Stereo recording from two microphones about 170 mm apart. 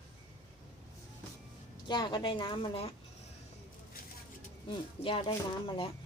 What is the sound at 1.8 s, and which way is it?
Speech, 25° left (ahead or behind).